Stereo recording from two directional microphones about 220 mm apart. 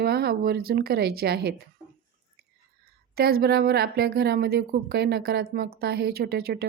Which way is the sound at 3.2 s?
45° right (ahead or behind).